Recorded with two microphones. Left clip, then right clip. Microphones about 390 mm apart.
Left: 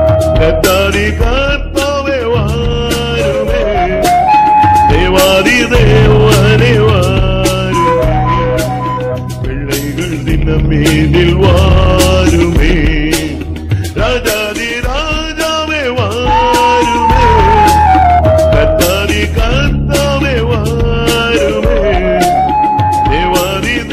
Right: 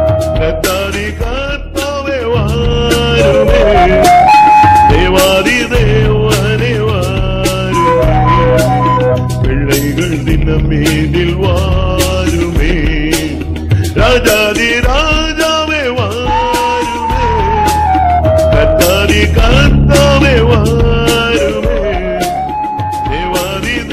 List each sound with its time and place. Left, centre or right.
3.2 s music: right
4.6 s music: right
4.8 s music: centre
5.1 s music: centre
5.9 s music: left
8.3 s music: right
12.0 s music: left
14.0 s music: right
16.3 s music: left
17.2 s music: left
18.3 s music: centre
19.5 s music: right